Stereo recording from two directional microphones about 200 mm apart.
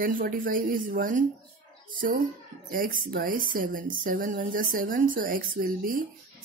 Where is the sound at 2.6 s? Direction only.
45° right (ahead or behind).